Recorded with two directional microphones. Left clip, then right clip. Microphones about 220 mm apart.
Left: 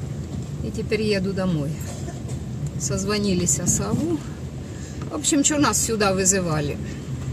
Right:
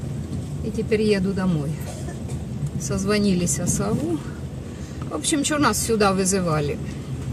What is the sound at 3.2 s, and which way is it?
Speech, 20° left (ahead or behind).